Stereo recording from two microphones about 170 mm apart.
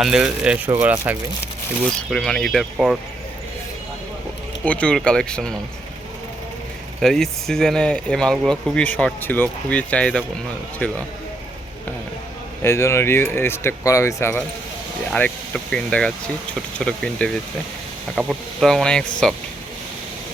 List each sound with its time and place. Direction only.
0.0 s speech: 5° right (ahead or behind)
2.0 s speech: 5° left (ahead or behind)
4.6 s speech: 5° left (ahead or behind)
7.0 s speech: centre (ahead or behind)
12.6 s speech: 15° left (ahead or behind)
15.1 s speech: 5° left (ahead or behind)